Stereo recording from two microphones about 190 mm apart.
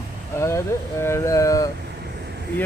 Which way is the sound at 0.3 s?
15° left (ahead or behind).